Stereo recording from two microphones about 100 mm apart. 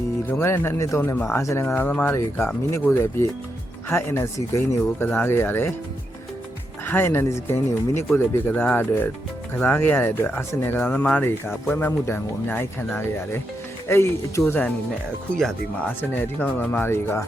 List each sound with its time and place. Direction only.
0.3 s speech: 25° left (ahead or behind)
1.4 s speech: 30° left (ahead or behind)
1.6 s speech: 20° left (ahead or behind)
6.8 s speech: 20° left (ahead or behind)
16.0 s speech: 20° left (ahead or behind)